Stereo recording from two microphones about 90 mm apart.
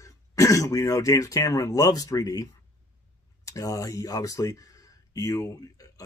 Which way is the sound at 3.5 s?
40° left (ahead or behind).